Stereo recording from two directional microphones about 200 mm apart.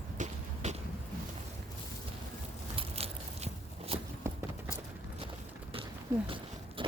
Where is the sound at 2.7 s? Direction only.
30° right (ahead or behind).